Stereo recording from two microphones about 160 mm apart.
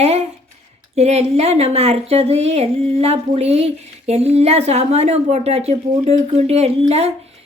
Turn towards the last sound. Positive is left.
turn(degrees=-40)  # may be behind; listen again after turning